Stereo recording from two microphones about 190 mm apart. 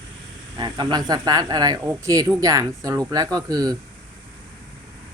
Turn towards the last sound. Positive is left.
turn(degrees=-20)  # may be behind; listen again after turning